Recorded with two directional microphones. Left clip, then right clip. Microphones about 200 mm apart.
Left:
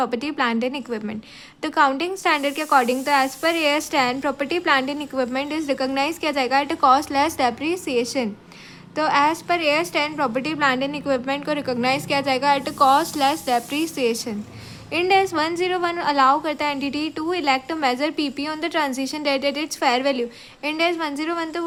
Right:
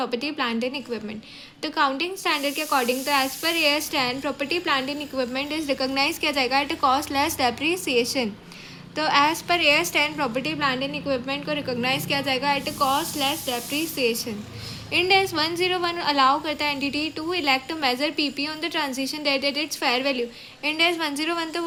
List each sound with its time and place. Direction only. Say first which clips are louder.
0.0 s a woman's voice: left 4 dB; 15° left (ahead or behind)